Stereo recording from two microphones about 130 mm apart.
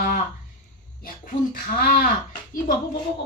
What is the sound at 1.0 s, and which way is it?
A woman's voice, 90° left.